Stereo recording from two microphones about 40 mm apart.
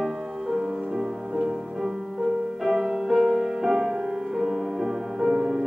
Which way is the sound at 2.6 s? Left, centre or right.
Centre.